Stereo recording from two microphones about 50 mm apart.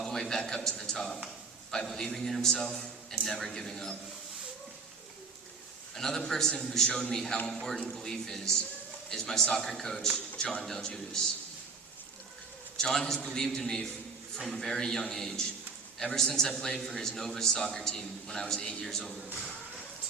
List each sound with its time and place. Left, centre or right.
0.0 s a man's voice: centre
5.9 s a man's voice: centre
10.3 s speech: centre
10.6 s a man's voice: centre
12.7 s a man's voice: centre